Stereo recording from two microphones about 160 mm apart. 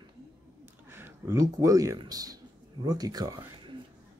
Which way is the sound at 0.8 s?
15° right (ahead or behind).